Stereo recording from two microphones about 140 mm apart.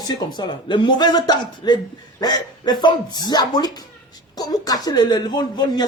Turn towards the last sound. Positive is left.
turn(degrees=30)  # may be behind; listen again after turning